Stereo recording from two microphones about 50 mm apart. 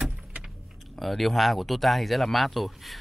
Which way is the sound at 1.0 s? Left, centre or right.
Centre.